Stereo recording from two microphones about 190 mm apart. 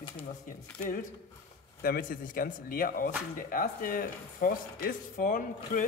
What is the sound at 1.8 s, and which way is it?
Speech, 50° left (ahead or behind).